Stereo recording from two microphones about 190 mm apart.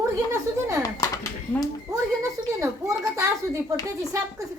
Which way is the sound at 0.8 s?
20° left (ahead or behind).